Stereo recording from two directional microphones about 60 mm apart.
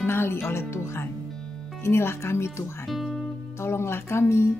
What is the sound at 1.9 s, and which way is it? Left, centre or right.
Speech, left.